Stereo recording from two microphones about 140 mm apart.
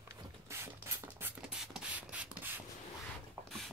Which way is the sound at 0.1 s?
20° right (ahead or behind).